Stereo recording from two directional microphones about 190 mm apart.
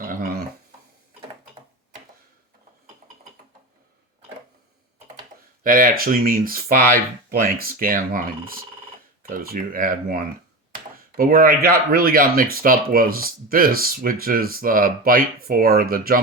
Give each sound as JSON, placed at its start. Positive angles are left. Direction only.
{"t": 0.0, "sound": "dog", "side_deg": -50}
{"t": 5.6, "sound": "speech", "side_deg": -50}